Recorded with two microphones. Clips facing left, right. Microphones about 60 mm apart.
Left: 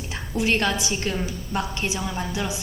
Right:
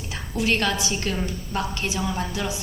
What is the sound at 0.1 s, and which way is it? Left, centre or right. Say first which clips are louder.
A woman's voice: left 1 dB; left.